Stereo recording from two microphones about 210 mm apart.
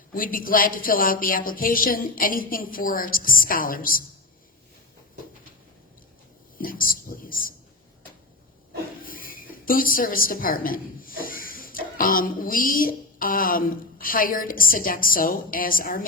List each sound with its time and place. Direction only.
0.1 s speech: 40° left (ahead or behind)
6.6 s speech: 40° left (ahead or behind)
9.0 s a woman's voice: 40° left (ahead or behind)